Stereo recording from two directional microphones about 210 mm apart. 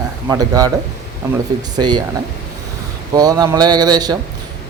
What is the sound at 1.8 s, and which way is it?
Speech, 20° right (ahead or behind).